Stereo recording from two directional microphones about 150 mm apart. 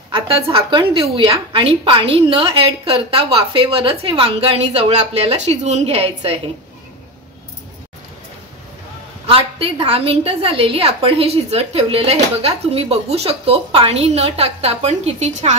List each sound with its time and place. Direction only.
0.1 s a woman's voice: 35° right (ahead or behind)
9.2 s a woman's voice: 40° right (ahead or behind)